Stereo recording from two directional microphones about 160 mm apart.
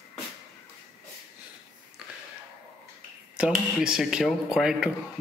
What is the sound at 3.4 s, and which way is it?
Speech, 5° right (ahead or behind).